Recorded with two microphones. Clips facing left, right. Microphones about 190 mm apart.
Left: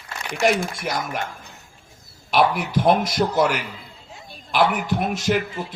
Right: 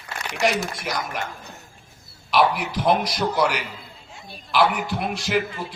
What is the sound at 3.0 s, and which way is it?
Speech, 25° left (ahead or behind).